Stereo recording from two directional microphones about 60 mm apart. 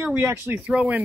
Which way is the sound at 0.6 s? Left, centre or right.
Right.